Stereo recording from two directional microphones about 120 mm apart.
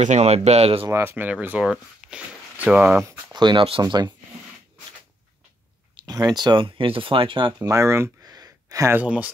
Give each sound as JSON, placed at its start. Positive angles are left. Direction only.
{"t": 0.0, "sound": "speech", "side_deg": -70}
{"t": 0.8, "sound": "speech", "side_deg": -25}
{"t": 1.1, "sound": "speech", "side_deg": -15}
{"t": 3.3, "sound": "speech", "side_deg": -40}
{"t": 3.8, "sound": "speech", "side_deg": -35}
{"t": 5.9, "sound": "speech", "side_deg": -35}
{"t": 7.6, "sound": "speech", "side_deg": -25}
{"t": 8.9, "sound": "speech", "side_deg": -10}